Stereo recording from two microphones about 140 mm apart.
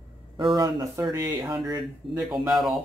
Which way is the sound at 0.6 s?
25° right (ahead or behind).